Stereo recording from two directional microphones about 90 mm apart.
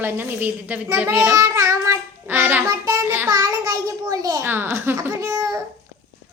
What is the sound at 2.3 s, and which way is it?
Speech, 20° right (ahead or behind).